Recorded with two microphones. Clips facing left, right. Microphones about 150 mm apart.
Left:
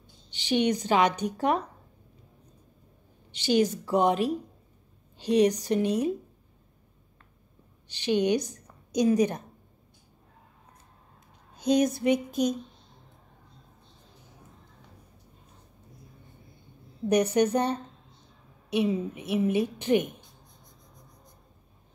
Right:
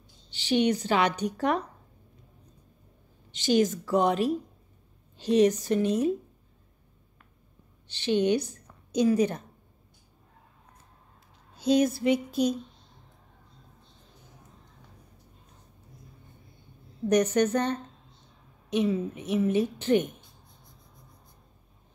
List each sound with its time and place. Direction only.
0.3 s a woman's voice: 15° left (ahead or behind)
3.3 s a sound: 45° right (ahead or behind)
3.6 s a woman's voice: 15° left (ahead or behind)
5.1 s a woman's voice: 15° left (ahead or behind)
7.9 s a woman's voice: 15° left (ahead or behind)
11.5 s a woman's voice: 15° left (ahead or behind)
17.1 s a woman's voice: 10° left (ahead or behind)